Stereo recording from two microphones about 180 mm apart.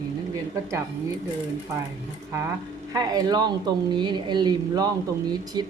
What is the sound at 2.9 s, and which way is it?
Speech, 20° right (ahead or behind).